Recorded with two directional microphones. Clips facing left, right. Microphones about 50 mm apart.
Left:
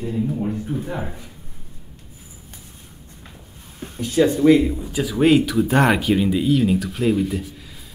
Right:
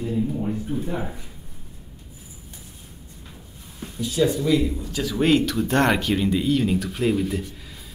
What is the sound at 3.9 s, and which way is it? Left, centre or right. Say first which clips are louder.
Speech: left 4 dB; left.